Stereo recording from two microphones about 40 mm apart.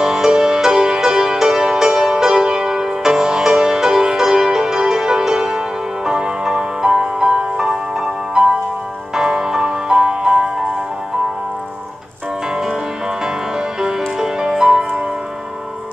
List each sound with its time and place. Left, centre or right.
0.0 s music: centre
13.2 s music: centre